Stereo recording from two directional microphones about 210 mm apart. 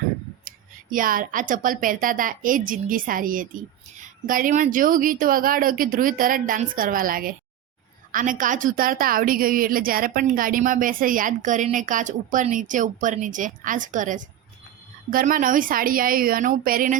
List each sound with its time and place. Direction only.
0.4 s a woman's voice: 40° right (ahead or behind)